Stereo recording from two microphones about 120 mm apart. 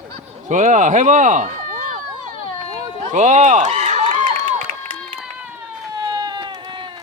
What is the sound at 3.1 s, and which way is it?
Speech, 80° right.